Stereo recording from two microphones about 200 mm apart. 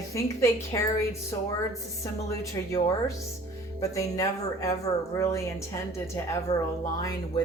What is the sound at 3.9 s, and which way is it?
A woman's voice, 15° left (ahead or behind).